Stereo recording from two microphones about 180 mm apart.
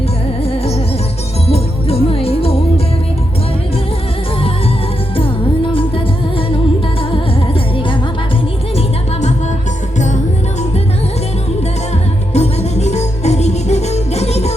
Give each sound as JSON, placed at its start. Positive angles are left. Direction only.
{"t": 1.5, "sound": "music", "side_deg": 35}
{"t": 12.3, "sound": "music", "side_deg": 35}